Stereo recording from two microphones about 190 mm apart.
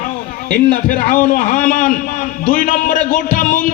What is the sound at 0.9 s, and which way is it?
A man's voice, 45° left (ahead or behind).